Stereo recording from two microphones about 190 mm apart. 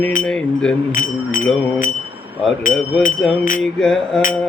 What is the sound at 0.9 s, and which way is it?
Speech, 45° left (ahead or behind).